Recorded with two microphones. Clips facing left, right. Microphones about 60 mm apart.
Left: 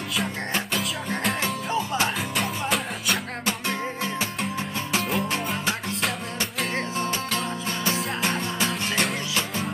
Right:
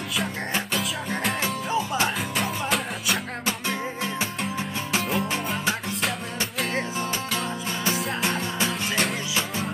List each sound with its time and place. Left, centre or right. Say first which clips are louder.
0.7 s music: even; centre
4.9 s music: even; centre
7.8 s music: even; centre